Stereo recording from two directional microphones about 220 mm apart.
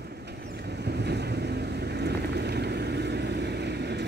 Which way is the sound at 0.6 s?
50° right (ahead or behind).